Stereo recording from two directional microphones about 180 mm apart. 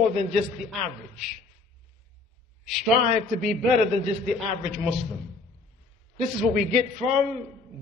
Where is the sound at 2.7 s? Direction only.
Centre (ahead or behind).